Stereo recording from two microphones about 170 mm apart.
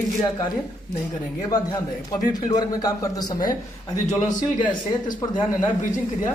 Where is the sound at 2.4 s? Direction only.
20° left (ahead or behind).